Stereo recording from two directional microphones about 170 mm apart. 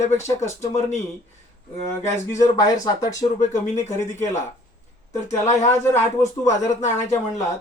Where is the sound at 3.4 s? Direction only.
45° left (ahead or behind).